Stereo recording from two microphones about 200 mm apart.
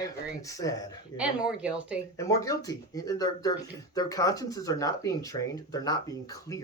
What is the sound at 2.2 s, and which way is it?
Speech, 15° left (ahead or behind).